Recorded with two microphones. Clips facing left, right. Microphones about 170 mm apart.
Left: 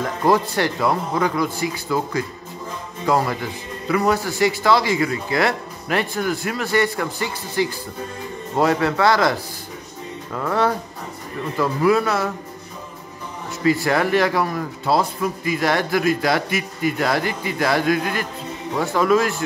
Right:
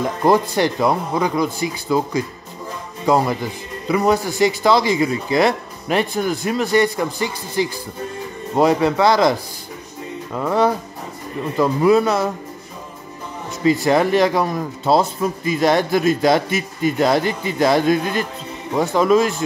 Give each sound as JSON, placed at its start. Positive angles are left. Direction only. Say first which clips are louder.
{"t": 0.0, "sound": "speech", "louder": "right 2 dB", "side_deg": -15}
{"t": 3.9, "sound": "a man's voice", "louder": "right 2 dB", "side_deg": -20}
{"t": 13.7, "sound": "a man's voice", "louder": "right 3 dB", "side_deg": -20}